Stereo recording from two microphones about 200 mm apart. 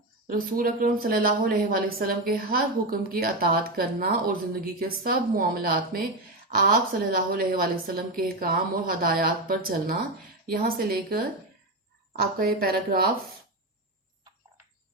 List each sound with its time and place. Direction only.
0.3 s a woman's voice: 45° right (ahead or behind)
12.4 s a woman's voice: 50° right (ahead or behind)